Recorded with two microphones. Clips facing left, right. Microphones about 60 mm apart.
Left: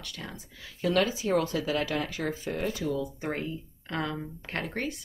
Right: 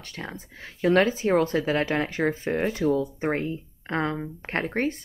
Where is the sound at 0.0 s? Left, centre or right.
Right.